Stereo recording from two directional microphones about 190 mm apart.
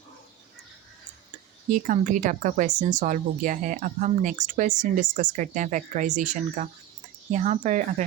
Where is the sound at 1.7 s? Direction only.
45° right (ahead or behind).